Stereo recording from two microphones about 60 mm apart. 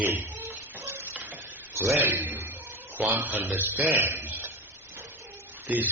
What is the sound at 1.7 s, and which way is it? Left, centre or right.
Speech, right.